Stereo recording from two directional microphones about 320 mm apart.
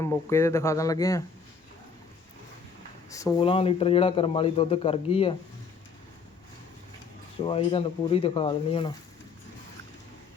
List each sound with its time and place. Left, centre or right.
0.0 s a man's voice: centre
3.1 s a man's voice: centre
7.4 s a man's voice: centre